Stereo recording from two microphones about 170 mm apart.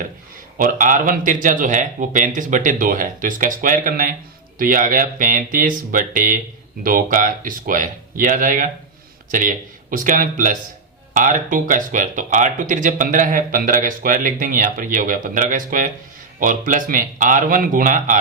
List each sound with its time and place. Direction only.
0.6 s speech: 50° right (ahead or behind)